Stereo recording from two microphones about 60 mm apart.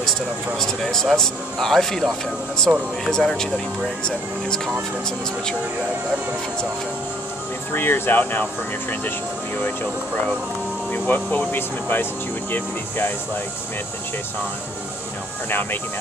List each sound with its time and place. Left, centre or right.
1.1 s speech: centre
7.7 s speech: left
10.9 s speech: left